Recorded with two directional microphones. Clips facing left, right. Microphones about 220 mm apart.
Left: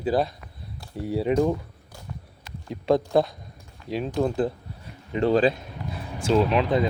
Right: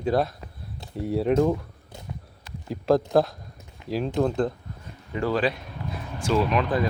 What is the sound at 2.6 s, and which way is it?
Speech, centre (ahead or behind).